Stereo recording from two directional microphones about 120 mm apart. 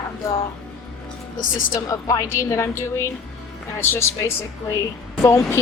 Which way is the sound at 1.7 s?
25° left (ahead or behind).